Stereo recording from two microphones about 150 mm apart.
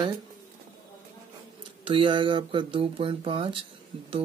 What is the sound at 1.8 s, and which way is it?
Speech, 35° right (ahead or behind).